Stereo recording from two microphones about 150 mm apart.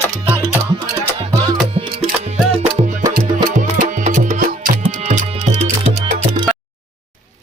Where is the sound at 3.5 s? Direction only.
60° right (ahead or behind).